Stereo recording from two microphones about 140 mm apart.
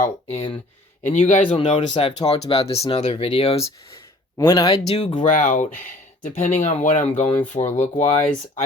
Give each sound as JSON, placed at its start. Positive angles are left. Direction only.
{"t": 0.0, "sound": "speech", "side_deg": 50}
{"t": 1.0, "sound": "speech", "side_deg": 60}
{"t": 1.5, "sound": "speech", "side_deg": 45}
{"t": 1.9, "sound": "speech", "side_deg": 35}
{"t": 4.4, "sound": "speech", "side_deg": 25}
{"t": 4.9, "sound": "speech", "side_deg": 50}